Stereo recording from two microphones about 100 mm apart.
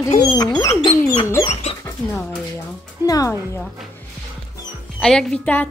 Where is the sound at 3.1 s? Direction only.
35° left (ahead or behind).